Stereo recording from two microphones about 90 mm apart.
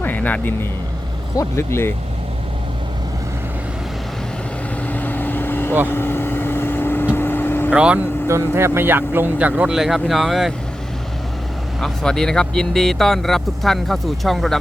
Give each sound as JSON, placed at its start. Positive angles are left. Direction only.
{"t": 0.0, "sound": "speech", "side_deg": 20}
{"t": 1.4, "sound": "speech", "side_deg": 30}
{"t": 4.9, "sound": "vehicle", "side_deg": 20}
{"t": 7.7, "sound": "speech", "side_deg": -15}
{"t": 8.3, "sound": "speech", "side_deg": -30}
{"t": 11.8, "sound": "speech", "side_deg": 5}